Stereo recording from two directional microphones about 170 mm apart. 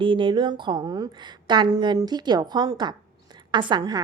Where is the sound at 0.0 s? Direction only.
30° right (ahead or behind).